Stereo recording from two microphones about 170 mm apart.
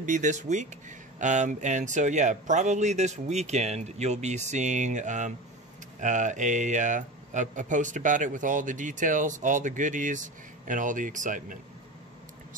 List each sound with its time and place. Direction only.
0.0 s speech: 45° right (ahead or behind)